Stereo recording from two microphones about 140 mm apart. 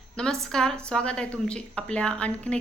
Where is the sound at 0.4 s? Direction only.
5° left (ahead or behind).